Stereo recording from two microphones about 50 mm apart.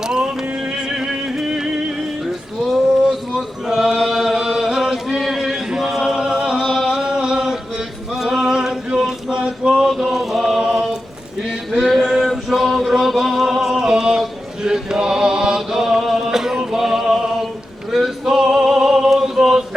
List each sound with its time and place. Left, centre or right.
0.0 s music: centre
3.1 s chant: centre
8.1 s male singing: centre
9.7 s mantra: centre
11.4 s a sound: centre
14.2 s chant: centre
16.7 s a sound: centre
17.9 s male singing: centre